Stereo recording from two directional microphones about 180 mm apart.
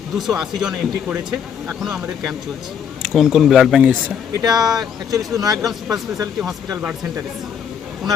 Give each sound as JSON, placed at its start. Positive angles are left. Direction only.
{"t": 0.2, "sound": "speech", "side_deg": 0}
{"t": 4.4, "sound": "speech", "side_deg": -20}
{"t": 4.6, "sound": "speech", "side_deg": 0}
{"t": 5.1, "sound": "speech", "side_deg": -20}
{"t": 5.5, "sound": "speech", "side_deg": 0}